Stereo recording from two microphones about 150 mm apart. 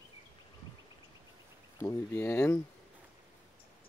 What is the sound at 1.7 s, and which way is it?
Speech, 15° left (ahead or behind).